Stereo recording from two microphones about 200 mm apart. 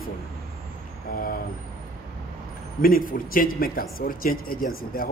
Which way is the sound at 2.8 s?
45° left (ahead or behind).